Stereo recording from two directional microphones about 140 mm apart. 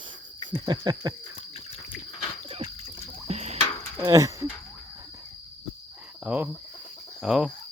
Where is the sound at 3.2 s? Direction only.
50° right (ahead or behind).